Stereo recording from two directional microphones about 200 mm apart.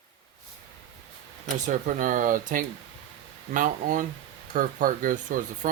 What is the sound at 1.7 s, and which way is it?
Speech, 40° right (ahead or behind).